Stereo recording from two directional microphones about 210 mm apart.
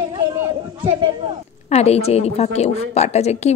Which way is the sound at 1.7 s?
30° left (ahead or behind).